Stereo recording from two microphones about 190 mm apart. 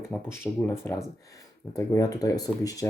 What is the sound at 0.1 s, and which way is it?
Speech, 10° left (ahead or behind).